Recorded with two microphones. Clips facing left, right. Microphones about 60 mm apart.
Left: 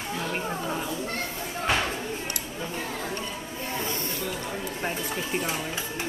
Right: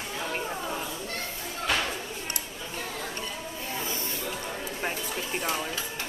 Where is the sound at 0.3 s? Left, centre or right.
Centre.